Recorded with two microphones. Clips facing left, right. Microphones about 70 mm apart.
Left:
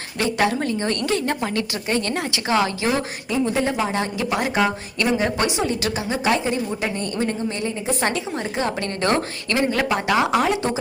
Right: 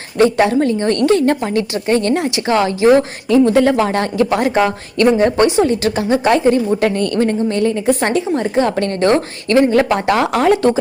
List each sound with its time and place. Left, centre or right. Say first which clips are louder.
0.2 s a woman's voice: right 9 dB; right
2.5 s a woman's voice: right 9 dB; right
3.2 s speech: right 10 dB; right
3.8 s speech: right 8 dB; right
6.7 s speech: right 9 dB; right
8.0 s a woman's voice: right 8 dB; right